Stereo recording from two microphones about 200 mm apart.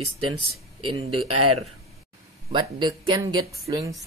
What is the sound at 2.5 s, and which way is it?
Speech, 25° right (ahead or behind).